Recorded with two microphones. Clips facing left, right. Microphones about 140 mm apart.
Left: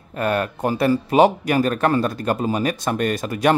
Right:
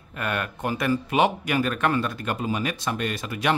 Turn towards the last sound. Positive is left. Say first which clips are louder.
# left 7 dB
turn(degrees=45)  # may be behind; listen again after turning